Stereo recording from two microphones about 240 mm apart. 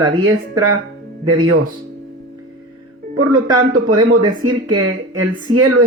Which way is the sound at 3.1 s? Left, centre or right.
Right.